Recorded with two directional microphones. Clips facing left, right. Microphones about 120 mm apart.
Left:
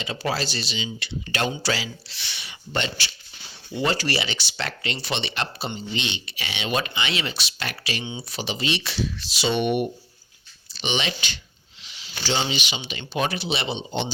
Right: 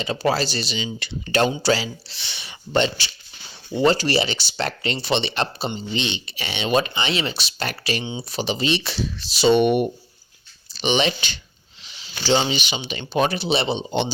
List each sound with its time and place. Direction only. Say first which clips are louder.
0.0 s speech: right 5 dB; 40° right (ahead or behind)
4.3 s speech: right 5 dB; 35° right (ahead or behind)
11.8 s a sound: right 1 dB; 35° right (ahead or behind)
12.3 s speech: right 6 dB; 35° right (ahead or behind)